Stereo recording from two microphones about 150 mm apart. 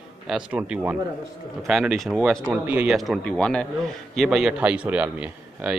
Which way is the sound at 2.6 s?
10° right (ahead or behind).